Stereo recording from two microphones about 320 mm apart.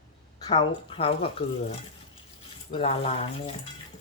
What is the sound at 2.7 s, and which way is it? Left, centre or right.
Speech, centre.